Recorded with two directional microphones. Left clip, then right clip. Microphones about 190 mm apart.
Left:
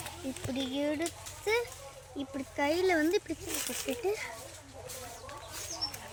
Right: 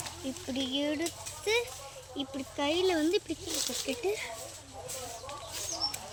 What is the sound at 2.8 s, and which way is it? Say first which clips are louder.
Speech: right 1 dB; centre (ahead or behind).